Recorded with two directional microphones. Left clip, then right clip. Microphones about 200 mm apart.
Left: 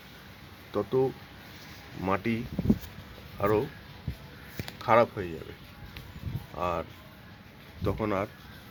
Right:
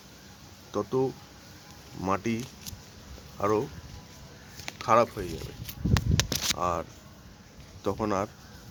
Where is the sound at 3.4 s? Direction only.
5° right (ahead or behind).